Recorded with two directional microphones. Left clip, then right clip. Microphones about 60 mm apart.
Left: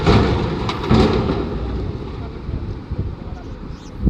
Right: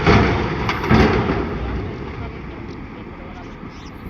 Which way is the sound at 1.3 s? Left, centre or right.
Left.